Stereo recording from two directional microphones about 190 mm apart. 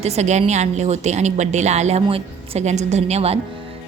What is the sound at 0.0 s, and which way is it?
A woman's voice, 35° right (ahead or behind).